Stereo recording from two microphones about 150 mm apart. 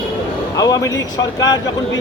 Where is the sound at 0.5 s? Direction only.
25° left (ahead or behind).